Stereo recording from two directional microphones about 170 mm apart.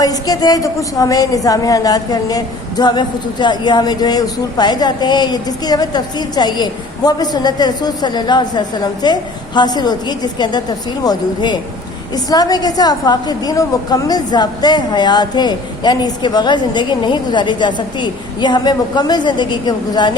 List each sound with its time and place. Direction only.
0.0 s a woman's voice: 20° left (ahead or behind)